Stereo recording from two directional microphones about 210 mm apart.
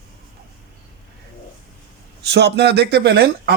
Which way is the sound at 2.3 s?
55° right (ahead or behind).